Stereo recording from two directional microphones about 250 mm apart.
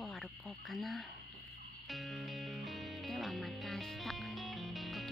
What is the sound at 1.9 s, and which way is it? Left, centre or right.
Music, centre.